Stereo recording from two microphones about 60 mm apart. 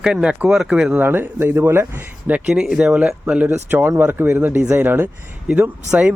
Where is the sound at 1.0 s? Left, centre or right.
Right.